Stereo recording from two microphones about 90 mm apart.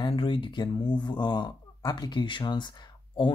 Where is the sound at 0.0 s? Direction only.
70° left (ahead or behind).